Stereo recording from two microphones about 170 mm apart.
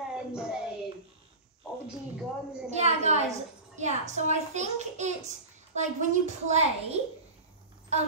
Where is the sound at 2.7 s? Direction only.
40° right (ahead or behind).